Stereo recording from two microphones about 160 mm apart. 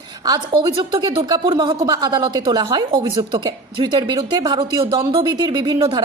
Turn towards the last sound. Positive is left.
turn(degrees=-25)  # may be behind; listen again after turning